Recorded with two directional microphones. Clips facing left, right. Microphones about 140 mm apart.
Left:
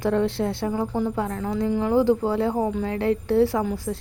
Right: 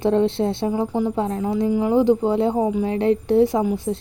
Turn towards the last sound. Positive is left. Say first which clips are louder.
# right 4 dB
turn(degrees=-25)  # may be behind; listen again after turning